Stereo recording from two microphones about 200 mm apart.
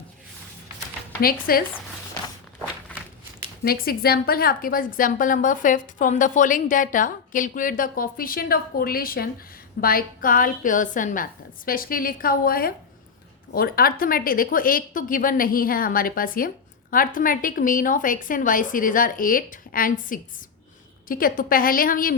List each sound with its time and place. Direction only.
1.2 s a woman's voice: 45° left (ahead or behind)
3.6 s a woman's voice: 50° left (ahead or behind)